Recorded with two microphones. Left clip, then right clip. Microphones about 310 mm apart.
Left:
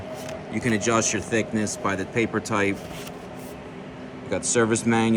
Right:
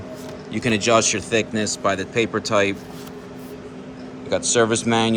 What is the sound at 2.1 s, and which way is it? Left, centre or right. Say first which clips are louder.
Speech: right 4 dB; centre.